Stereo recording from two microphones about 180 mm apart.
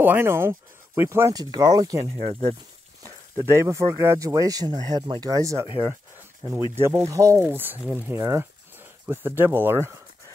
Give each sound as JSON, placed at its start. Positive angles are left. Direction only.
{"t": 0.0, "sound": "speech", "side_deg": -10}